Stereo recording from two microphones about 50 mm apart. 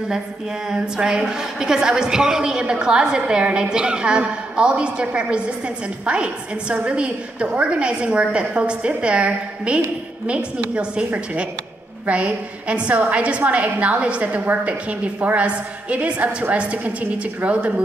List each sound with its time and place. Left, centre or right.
0.7 s a woman's voice: centre
12.1 s a woman's voice: right